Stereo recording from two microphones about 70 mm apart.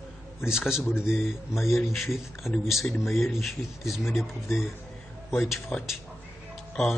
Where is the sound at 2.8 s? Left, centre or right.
Left.